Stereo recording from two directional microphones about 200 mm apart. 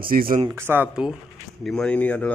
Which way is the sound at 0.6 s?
10° right (ahead or behind).